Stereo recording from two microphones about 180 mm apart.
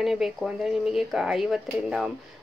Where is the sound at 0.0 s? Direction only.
Centre (ahead or behind).